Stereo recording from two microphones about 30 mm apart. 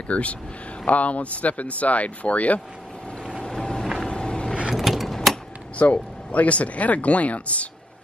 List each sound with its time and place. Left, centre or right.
0.1 s speech: left
3.4 s vehicle: left
3.8 s vehicle: centre
4.1 s vehicle: left
4.7 s a sound: centre
5.8 s speech: left